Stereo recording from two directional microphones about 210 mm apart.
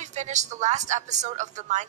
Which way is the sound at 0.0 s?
35° right (ahead or behind).